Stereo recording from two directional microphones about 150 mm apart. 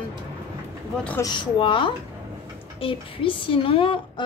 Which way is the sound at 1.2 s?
30° left (ahead or behind).